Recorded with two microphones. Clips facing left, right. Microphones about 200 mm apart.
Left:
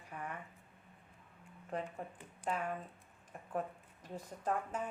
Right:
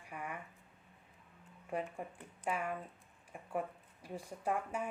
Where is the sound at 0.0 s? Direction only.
10° right (ahead or behind).